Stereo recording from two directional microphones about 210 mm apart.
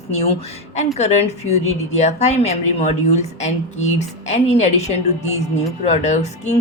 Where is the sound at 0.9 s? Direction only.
30° left (ahead or behind).